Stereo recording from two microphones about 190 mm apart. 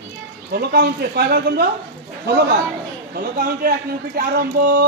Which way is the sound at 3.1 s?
50° right (ahead or behind).